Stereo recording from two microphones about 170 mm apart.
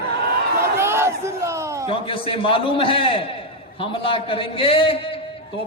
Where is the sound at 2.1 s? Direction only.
30° left (ahead or behind).